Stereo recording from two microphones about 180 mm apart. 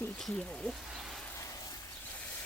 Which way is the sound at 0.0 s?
5° left (ahead or behind).